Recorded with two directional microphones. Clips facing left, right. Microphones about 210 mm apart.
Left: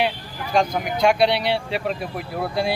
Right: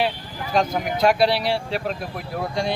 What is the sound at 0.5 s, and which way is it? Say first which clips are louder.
Speech: left 1 dB; centre (ahead or behind).